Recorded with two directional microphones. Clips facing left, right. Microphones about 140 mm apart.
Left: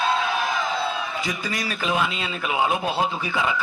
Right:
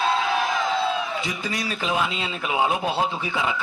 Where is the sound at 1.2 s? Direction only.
25° right (ahead or behind).